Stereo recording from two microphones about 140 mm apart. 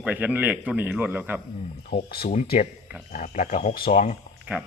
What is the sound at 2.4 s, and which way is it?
Speech, 80° left.